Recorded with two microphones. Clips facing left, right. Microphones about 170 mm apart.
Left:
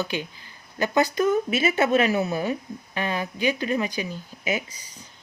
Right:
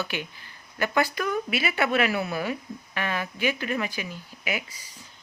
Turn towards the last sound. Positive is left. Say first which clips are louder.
# left 2 dB
turn(degrees=20)  # may be behind; listen again after turning